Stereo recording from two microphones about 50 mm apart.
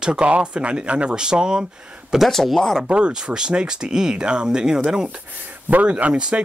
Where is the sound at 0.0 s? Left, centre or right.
Centre.